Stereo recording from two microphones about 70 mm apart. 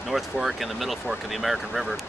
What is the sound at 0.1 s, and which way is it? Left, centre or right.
Speech, centre.